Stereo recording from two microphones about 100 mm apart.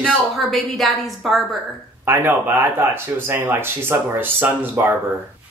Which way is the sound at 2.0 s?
20° right (ahead or behind).